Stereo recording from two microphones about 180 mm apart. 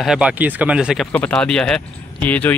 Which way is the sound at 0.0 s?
5° right (ahead or behind).